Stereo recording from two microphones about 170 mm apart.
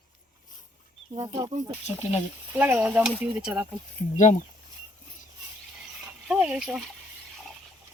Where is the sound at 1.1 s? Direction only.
25° right (ahead or behind).